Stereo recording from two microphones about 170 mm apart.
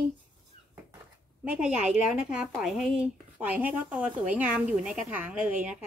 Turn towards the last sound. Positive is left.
turn(degrees=-10)  # may be behind; listen again after turning